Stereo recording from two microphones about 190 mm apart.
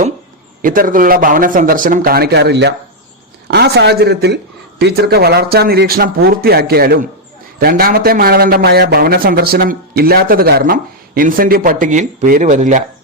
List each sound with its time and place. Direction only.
0.6 s a man's voice: 45° right (ahead or behind)